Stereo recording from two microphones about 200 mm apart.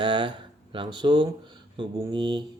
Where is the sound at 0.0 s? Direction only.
25° right (ahead or behind).